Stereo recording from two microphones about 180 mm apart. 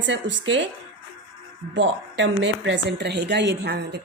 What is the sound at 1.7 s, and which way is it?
A woman's voice, 90° right.